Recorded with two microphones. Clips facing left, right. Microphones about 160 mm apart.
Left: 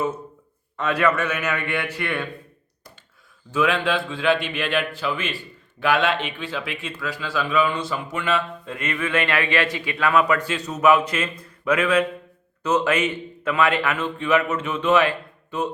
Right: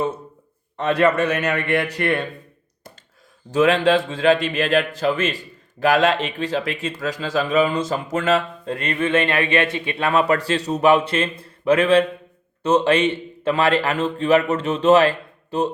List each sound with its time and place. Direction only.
0.8 s speech: 35° right (ahead or behind)
3.5 s speech: 40° right (ahead or behind)